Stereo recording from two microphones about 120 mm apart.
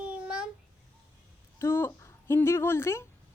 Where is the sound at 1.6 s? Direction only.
20° left (ahead or behind).